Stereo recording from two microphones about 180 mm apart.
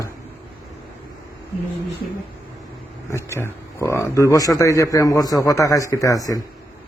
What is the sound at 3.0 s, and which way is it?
A man's voice, 15° left (ahead or behind).